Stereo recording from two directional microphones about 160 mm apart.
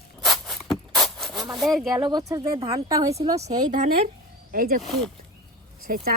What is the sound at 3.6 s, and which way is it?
Speech, 55° right (ahead or behind).